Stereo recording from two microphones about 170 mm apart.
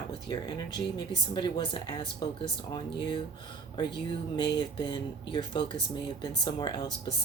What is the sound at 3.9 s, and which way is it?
Speech, 25° left (ahead or behind).